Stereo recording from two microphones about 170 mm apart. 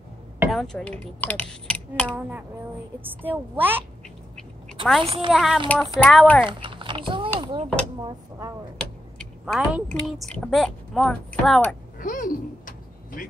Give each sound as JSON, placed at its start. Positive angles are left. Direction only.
{"t": 0.5, "sound": "speech", "side_deg": 0}
{"t": 2.1, "sound": "a woman's voice", "side_deg": -10}
{"t": 5.0, "sound": "a woman's voice", "side_deg": -35}
{"t": 5.3, "sound": "speech", "side_deg": 0}
{"t": 6.4, "sound": "speech", "side_deg": -30}
{"t": 9.5, "sound": "speech", "side_deg": 0}
{"t": 12.0, "sound": "a sound", "side_deg": 50}